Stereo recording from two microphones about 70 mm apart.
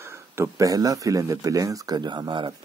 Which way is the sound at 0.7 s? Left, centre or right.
Right.